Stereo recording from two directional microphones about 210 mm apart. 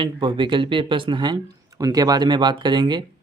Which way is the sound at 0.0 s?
20° right (ahead or behind).